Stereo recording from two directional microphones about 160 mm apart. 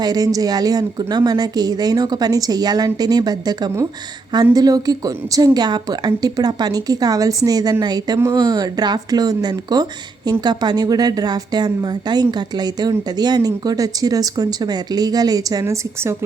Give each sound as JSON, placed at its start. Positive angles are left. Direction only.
{"t": 0.0, "sound": "a woman's voice", "side_deg": -25}